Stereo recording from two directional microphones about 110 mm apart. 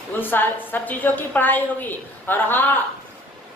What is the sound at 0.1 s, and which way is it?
A woman's voice, 20° left (ahead or behind).